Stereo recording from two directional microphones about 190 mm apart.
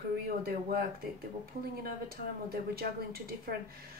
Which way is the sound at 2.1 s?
50° right (ahead or behind).